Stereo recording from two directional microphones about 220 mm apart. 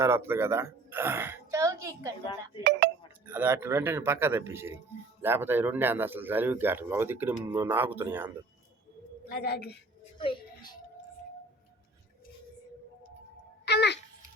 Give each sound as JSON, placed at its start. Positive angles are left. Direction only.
{"t": 0.0, "sound": "a woman's voice", "side_deg": -10}
{"t": 3.2, "sound": "speech", "side_deg": -10}
{"t": 9.3, "sound": "a woman's voice", "side_deg": 45}
{"t": 10.2, "sound": "a sound", "side_deg": 20}
{"t": 13.7, "sound": "babbling", "side_deg": 50}